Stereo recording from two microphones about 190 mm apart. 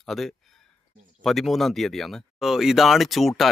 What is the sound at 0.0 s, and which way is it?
Speech, centre (ahead or behind).